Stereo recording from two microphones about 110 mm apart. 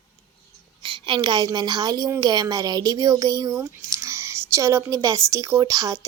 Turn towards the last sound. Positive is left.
turn(degrees=-30)  # may be behind; listen again after turning